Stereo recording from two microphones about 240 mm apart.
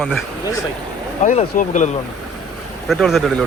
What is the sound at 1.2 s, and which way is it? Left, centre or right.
Speech, left.